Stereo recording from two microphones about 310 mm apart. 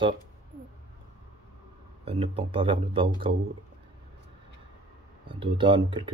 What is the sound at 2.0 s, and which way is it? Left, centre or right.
Speech, centre.